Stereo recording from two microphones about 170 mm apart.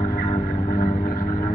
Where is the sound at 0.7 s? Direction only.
55° left (ahead or behind).